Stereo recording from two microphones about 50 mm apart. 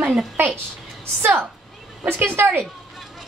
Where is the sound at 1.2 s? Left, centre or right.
Right.